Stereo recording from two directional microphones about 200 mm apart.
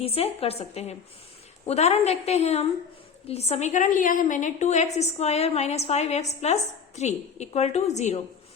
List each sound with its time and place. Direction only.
0.0 s a woman's voice: 30° left (ahead or behind)